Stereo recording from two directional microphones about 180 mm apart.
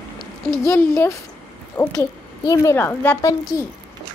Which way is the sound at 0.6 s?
15° left (ahead or behind).